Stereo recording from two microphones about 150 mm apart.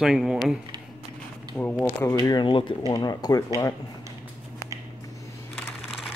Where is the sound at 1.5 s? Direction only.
5° left (ahead or behind).